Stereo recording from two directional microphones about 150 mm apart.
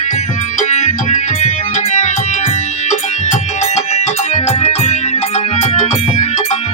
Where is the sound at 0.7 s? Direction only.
50° left (ahead or behind).